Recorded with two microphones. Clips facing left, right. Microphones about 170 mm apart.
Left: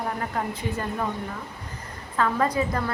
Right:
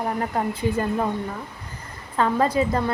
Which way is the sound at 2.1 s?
30° right (ahead or behind).